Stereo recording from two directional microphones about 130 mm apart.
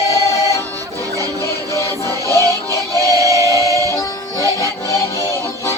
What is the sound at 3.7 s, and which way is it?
Music, 20° left (ahead or behind).